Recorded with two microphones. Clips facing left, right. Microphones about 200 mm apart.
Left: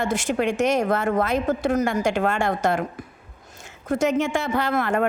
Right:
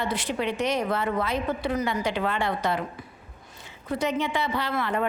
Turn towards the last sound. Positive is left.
turn(degrees=45)  # may be behind; listen again after turning